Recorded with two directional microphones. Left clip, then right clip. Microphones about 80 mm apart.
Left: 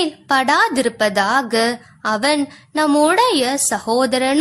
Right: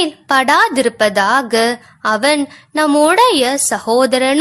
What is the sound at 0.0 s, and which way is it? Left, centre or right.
A woman's voice, right.